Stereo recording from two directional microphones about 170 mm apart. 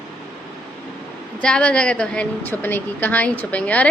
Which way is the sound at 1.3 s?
5° left (ahead or behind).